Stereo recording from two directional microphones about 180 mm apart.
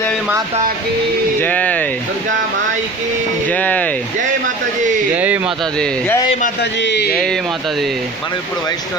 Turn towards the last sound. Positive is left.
turn(degrees=5)  # may be behind; listen again after turning